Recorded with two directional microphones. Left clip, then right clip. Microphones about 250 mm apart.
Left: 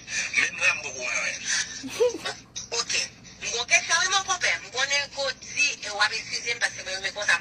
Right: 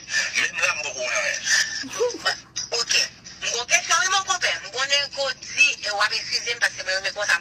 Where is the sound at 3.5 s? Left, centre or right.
Centre.